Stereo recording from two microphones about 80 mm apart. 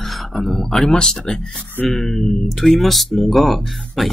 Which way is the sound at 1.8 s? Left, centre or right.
Centre.